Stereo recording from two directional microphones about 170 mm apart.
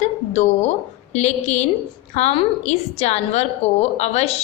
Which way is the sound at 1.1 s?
40° left (ahead or behind).